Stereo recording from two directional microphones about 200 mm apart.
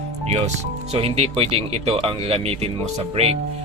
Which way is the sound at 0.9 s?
30° right (ahead or behind).